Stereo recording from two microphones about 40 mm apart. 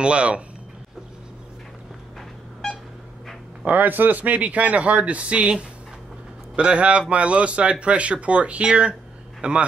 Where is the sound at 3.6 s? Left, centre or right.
Right.